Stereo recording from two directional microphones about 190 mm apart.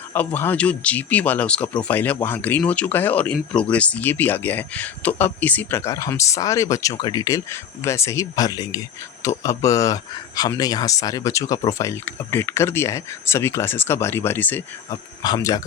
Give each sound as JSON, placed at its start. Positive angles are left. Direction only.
{"t": 0.3, "sound": "speech", "side_deg": 10}
{"t": 15.2, "sound": "speech", "side_deg": 20}